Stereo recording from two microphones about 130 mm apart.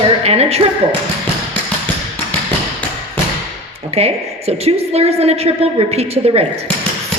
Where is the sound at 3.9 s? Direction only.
50° right (ahead or behind).